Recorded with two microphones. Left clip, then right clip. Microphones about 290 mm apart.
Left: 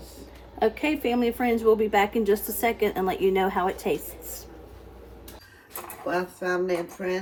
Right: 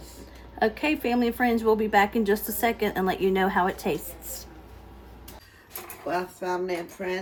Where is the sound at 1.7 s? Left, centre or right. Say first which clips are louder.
Left 1 dB; right.